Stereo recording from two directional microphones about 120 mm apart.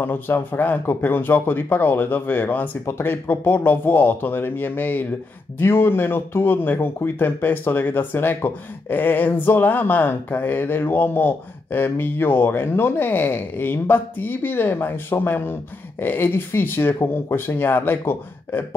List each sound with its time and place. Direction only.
0.0 s speech: 15° left (ahead or behind)